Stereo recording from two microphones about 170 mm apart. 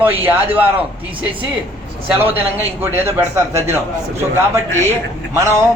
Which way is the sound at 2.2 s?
10° right (ahead or behind).